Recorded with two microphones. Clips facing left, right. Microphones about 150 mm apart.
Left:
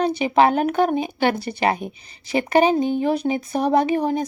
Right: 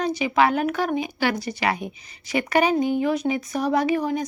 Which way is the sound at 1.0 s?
30° left (ahead or behind).